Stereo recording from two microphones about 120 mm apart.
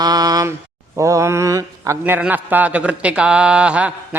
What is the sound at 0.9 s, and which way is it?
Speech, 25° right (ahead or behind).